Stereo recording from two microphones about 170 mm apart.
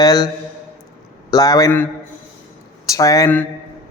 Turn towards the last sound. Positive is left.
turn(degrees=20)  # may be behind; listen again after turning